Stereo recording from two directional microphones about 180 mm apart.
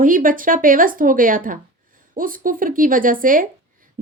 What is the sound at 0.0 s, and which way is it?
A woman's voice, 50° right (ahead or behind).